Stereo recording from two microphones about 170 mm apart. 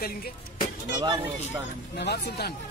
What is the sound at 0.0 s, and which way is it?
Speech, 60° left (ahead or behind).